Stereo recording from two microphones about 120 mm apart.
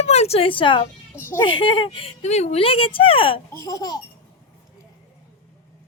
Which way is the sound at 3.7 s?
30° left (ahead or behind).